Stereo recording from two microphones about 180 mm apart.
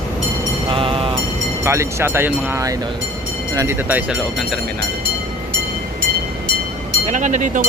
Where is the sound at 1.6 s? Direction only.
15° right (ahead or behind).